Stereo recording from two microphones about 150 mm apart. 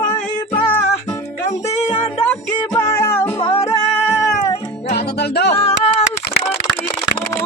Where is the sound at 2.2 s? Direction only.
15° left (ahead or behind).